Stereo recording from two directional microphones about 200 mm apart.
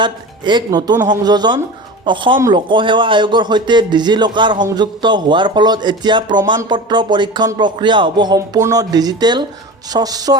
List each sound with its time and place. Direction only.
0.0 s a man's voice: 20° right (ahead or behind)